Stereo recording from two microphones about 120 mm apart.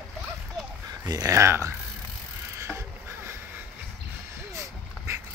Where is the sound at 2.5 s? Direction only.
20° right (ahead or behind).